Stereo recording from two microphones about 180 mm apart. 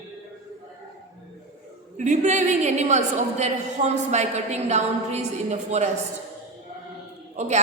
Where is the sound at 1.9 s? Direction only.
45° right (ahead or behind).